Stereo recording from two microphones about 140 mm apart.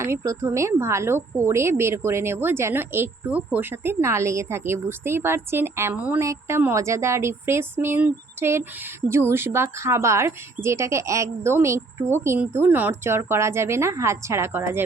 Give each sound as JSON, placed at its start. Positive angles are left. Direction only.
{"t": 0.0, "sound": "a woman's voice", "side_deg": -20}